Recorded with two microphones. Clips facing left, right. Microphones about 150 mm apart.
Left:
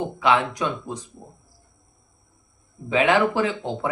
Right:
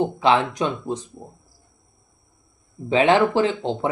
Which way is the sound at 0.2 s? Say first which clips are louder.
Even; 30° right (ahead or behind).